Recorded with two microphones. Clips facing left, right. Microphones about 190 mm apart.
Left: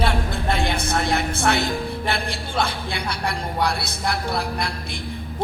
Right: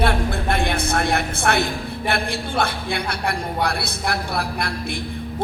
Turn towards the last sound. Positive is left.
turn(degrees=-55)  # may be behind; listen again after turning